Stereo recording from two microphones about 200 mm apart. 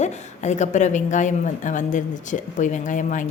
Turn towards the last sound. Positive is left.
turn(degrees=40)  # may be behind; listen again after turning